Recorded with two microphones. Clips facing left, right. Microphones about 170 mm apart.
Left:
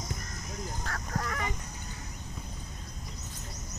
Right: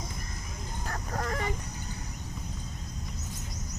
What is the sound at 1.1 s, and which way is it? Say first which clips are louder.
Dog: right 2 dB; 30° right (ahead or behind).